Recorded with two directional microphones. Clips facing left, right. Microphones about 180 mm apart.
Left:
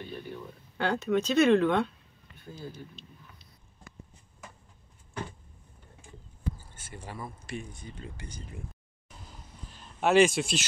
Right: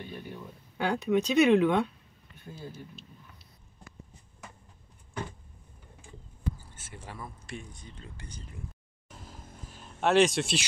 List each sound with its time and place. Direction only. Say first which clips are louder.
0.7 s speech: right 1 dB; 10° right (ahead or behind)
6.8 s speech: left 2 dB; centre (ahead or behind)
9.3 s vehicle: right 4 dB; 50° right (ahead or behind)
9.7 s a sound: left 1 dB; centre (ahead or behind)